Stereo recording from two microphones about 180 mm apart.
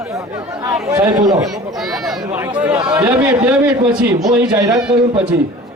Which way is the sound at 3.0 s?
20° right (ahead or behind).